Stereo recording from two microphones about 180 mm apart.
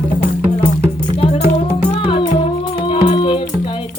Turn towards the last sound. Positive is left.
turn(degrees=30)  # may be behind; listen again after turning